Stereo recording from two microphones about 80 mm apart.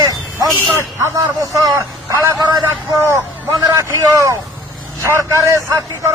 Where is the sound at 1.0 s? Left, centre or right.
Right.